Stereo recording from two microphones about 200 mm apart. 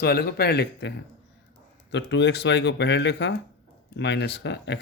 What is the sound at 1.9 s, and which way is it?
Speech, 60° left (ahead or behind).